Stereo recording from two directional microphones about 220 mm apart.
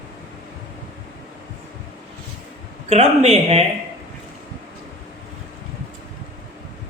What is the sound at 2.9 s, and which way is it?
Speech, 30° right (ahead or behind).